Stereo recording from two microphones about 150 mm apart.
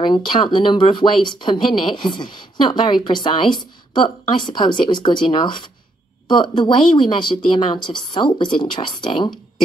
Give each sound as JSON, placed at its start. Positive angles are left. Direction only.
{"t": 0.0, "sound": "speech", "side_deg": 30}